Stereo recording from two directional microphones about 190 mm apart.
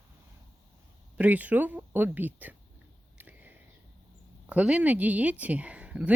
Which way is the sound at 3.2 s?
10° right (ahead or behind).